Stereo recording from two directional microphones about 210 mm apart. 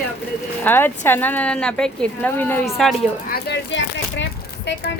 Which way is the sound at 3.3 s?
55° left (ahead or behind).